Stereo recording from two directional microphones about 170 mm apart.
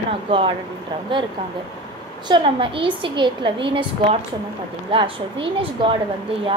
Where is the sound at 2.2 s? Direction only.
30° right (ahead or behind).